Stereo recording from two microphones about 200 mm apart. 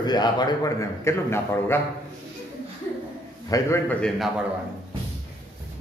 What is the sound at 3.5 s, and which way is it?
Speech, 15° left (ahead or behind).